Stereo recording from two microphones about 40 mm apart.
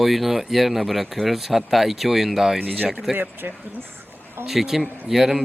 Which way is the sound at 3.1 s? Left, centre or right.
Right.